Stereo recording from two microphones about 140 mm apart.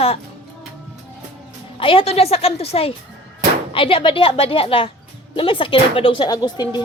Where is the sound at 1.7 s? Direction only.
40° left (ahead or behind).